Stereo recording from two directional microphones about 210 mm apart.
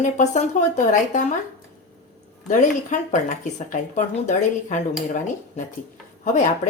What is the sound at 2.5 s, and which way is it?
Speech, 35° left (ahead or behind).